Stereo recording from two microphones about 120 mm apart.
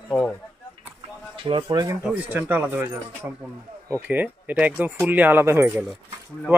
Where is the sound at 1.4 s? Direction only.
45° right (ahead or behind).